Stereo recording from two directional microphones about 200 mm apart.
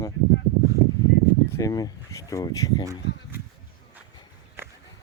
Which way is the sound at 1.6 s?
15° left (ahead or behind).